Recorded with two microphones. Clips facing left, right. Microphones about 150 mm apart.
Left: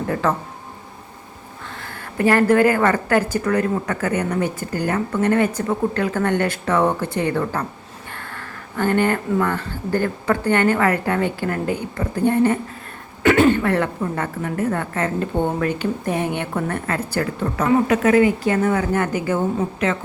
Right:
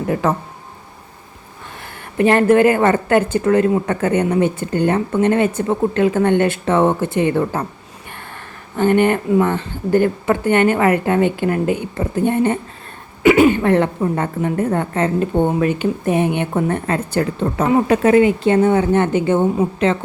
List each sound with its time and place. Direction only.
0.1 s a woman's voice: 20° right (ahead or behind)
1.8 s a woman's voice: 20° right (ahead or behind)
8.1 s a sound: 20° right (ahead or behind)
9.4 s a woman's voice: 20° right (ahead or behind)
13.6 s a woman's voice: 25° right (ahead or behind)
15.4 s a woman's voice: 15° right (ahead or behind); by 20.0 s 30° right (ahead or behind)